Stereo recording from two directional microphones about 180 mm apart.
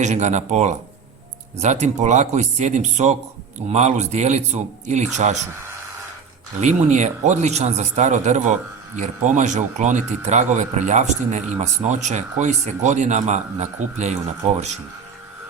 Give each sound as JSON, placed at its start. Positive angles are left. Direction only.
{"t": 0.0, "sound": "a man's voice", "side_deg": -40}
{"t": 6.6, "sound": "a man's voice", "side_deg": -40}